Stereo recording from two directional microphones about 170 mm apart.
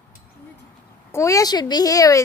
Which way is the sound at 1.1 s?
20° left (ahead or behind).